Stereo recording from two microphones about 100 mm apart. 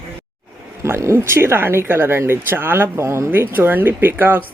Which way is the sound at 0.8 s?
30° right (ahead or behind).